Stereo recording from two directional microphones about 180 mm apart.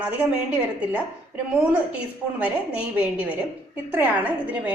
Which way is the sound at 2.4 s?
5° right (ahead or behind).